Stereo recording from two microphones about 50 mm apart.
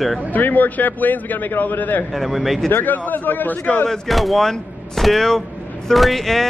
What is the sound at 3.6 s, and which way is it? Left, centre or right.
Speech, left.